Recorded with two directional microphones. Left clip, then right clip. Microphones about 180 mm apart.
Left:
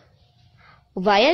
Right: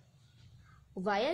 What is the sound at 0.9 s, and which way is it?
Speech, 35° left (ahead or behind).